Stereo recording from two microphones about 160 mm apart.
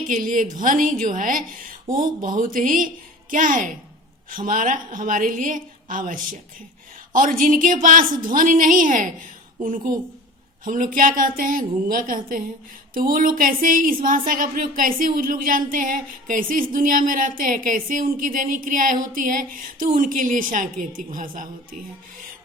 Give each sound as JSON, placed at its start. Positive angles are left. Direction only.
{"t": 0.1, "sound": "a woman's voice", "side_deg": -55}